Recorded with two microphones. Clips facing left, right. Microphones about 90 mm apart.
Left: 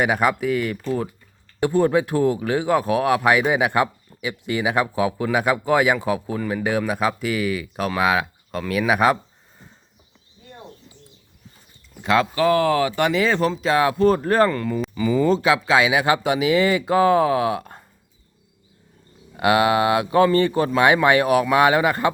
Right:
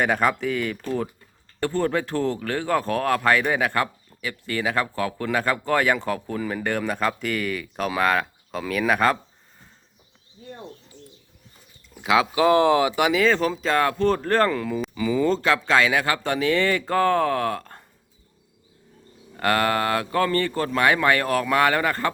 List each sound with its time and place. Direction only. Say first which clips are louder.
0.0 s speech: left 2 dB; 5° left (ahead or behind)
11.9 s speech: left 1 dB; 5° right (ahead or behind)
12.3 s speech: right 1 dB; 20° right (ahead or behind)
13.0 s speech: left 1 dB; 5° right (ahead or behind)
19.4 s speech: left 4 dB; 10° left (ahead or behind)